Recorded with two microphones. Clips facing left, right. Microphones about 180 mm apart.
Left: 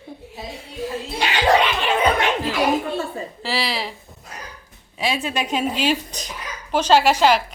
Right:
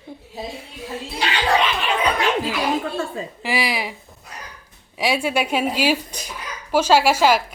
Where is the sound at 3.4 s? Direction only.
15° right (ahead or behind).